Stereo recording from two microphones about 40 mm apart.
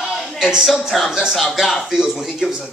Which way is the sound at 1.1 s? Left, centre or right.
Centre.